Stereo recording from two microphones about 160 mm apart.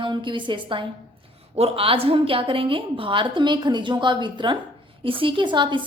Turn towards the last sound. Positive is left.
turn(degrees=-30)  # may be behind; listen again after turning